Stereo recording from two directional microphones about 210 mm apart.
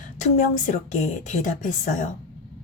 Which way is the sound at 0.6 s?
35° left (ahead or behind).